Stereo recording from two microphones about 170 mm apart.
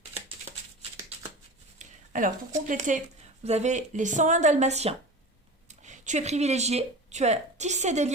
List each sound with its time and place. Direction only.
1.8 s speech: 50° right (ahead or behind)